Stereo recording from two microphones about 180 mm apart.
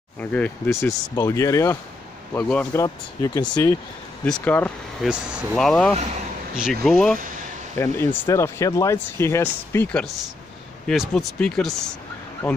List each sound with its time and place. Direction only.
0.2 s speech: 10° left (ahead or behind)
2.3 s speech: 5° left (ahead or behind)
2.7 s speech: 20° left (ahead or behind)
4.2 s speech: 10° left (ahead or behind)
5.0 s speech: 5° right (ahead or behind)
7.7 s speech: 15° left (ahead or behind)